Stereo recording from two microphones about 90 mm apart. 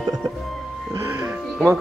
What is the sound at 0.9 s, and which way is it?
Music, 30° right (ahead or behind).